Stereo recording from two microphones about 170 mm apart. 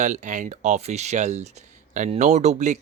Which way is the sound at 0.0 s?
45° right (ahead or behind).